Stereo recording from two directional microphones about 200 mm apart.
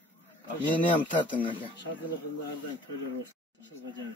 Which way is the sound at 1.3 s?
25° left (ahead or behind).